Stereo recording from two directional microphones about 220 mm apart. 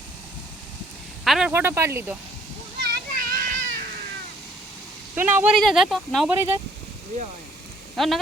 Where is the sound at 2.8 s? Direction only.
45° right (ahead or behind).